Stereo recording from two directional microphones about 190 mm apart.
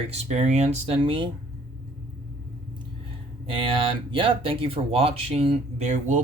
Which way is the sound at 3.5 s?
25° right (ahead or behind).